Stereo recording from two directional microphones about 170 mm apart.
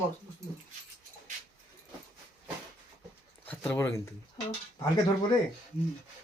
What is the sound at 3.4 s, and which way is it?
Speech, 10° left (ahead or behind).